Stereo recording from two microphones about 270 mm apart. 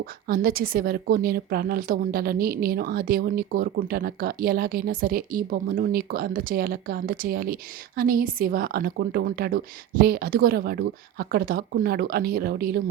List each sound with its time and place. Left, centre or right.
0.0 s a woman's voice: right